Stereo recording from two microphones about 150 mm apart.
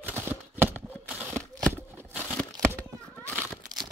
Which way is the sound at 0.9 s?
10° right (ahead or behind).